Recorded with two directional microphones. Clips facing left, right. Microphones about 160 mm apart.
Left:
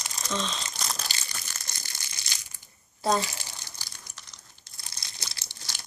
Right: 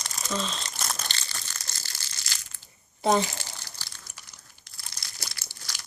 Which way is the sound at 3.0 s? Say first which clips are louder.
Right 3 dB; 20° right (ahead or behind).